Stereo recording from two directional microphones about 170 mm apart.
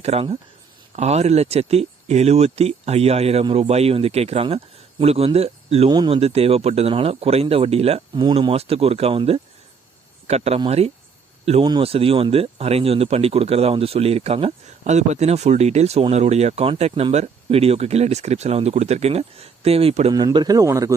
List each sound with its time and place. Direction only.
0.0 s speech: 40° right (ahead or behind)
20.1 s a man's voice: 25° right (ahead or behind)